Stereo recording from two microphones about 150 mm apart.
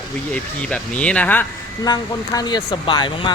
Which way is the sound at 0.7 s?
10° left (ahead or behind).